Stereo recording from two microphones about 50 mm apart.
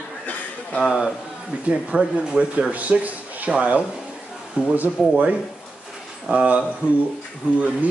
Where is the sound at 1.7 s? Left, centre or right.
Centre; by 5.3 s right.